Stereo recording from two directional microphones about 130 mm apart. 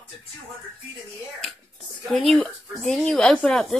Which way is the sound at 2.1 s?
Centre (ahead or behind).